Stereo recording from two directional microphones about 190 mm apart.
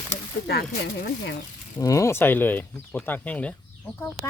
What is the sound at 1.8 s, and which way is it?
Speech, 15° left (ahead or behind).